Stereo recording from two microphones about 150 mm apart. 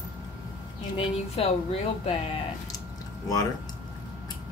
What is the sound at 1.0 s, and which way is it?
Speech, 45° left (ahead or behind).